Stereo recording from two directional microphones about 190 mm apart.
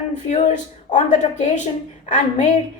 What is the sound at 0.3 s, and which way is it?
A woman's voice, 40° left (ahead or behind).